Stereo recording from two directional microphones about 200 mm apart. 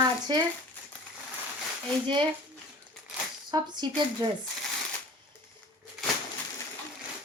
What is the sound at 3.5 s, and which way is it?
Speech, 20° right (ahead or behind).